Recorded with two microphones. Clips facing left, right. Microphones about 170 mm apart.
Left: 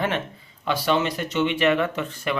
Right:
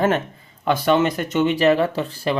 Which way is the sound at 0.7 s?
50° right (ahead or behind).